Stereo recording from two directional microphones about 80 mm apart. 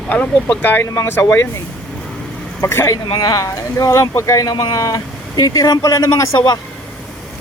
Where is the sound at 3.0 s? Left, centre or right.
Left.